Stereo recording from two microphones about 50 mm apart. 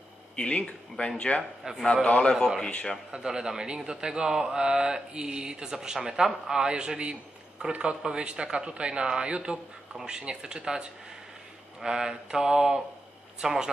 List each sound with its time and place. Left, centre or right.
0.4 s speech: left
1.6 s a man's voice: centre
2.0 s speech: left
3.1 s a man's voice: centre